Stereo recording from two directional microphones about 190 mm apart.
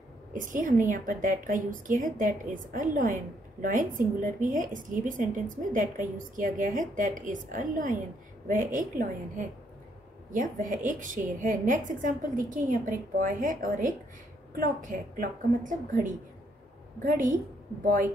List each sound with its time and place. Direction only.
0.3 s a woman's voice: 45° right (ahead or behind)